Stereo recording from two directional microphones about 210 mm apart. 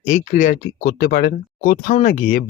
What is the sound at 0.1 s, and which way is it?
Speech, 35° left (ahead or behind).